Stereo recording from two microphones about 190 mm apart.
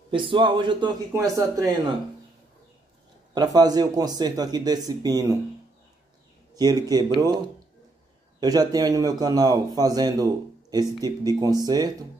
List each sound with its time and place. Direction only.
0.1 s speech: 25° right (ahead or behind)
3.3 s speech: 20° right (ahead or behind)
6.5 s speech: 20° right (ahead or behind)
8.4 s speech: 20° right (ahead or behind)